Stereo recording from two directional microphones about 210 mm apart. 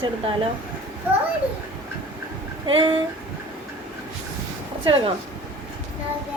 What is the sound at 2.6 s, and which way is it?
Speech, 25° right (ahead or behind).